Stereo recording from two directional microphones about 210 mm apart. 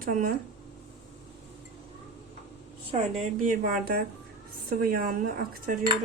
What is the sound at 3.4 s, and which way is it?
A woman's voice, 40° right (ahead or behind).